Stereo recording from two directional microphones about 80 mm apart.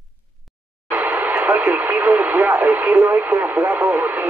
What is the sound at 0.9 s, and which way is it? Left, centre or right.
Radio, centre.